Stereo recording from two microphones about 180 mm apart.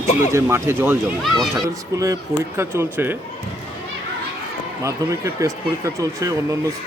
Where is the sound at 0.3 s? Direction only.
15° right (ahead or behind).